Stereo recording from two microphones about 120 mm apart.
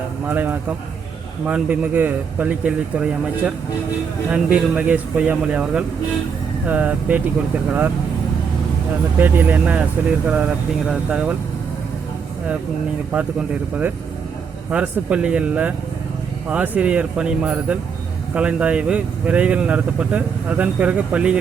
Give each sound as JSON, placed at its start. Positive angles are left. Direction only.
{"t": 0.3, "sound": "speech", "side_deg": -15}
{"t": 9.2, "sound": "speech", "side_deg": -15}
{"t": 10.8, "sound": "speech", "side_deg": -10}
{"t": 13.1, "sound": "speech", "side_deg": -10}